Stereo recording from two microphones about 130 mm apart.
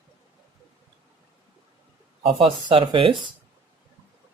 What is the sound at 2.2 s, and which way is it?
Speech, 45° right (ahead or behind).